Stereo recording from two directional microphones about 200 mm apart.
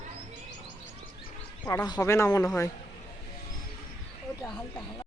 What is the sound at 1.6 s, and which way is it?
Speech, 20° left (ahead or behind).